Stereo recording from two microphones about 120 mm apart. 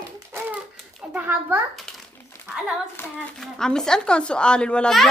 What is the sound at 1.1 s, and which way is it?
Speech, 10° right (ahead or behind).